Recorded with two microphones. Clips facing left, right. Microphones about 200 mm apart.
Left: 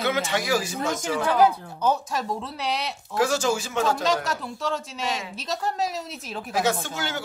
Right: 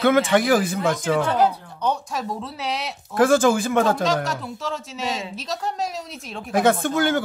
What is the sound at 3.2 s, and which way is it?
Speech, 55° right (ahead or behind).